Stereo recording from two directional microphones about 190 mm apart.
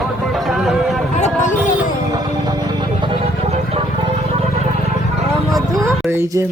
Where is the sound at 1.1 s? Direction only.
40° left (ahead or behind).